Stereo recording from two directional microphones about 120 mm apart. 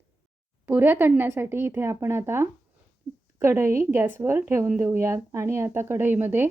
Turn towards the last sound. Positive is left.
turn(degrees=-20)  # may be behind; listen again after turning